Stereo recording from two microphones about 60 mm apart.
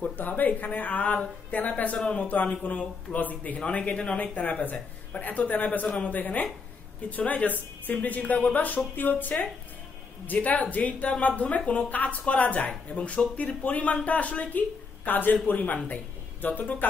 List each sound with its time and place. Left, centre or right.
0.2 s speech: left
2.0 s a man's voice: centre
2.2 s a man's voice: left